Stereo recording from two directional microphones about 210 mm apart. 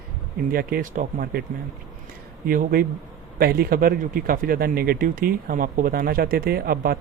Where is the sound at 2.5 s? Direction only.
45° right (ahead or behind).